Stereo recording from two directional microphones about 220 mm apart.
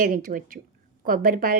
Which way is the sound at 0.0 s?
40° right (ahead or behind).